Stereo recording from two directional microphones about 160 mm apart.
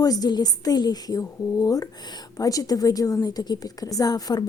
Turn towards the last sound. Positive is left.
turn(degrees=25)  # may be behind; listen again after turning